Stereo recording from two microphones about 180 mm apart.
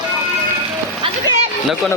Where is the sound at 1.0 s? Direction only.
30° right (ahead or behind).